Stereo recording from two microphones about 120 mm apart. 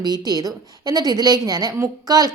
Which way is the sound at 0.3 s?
30° right (ahead or behind).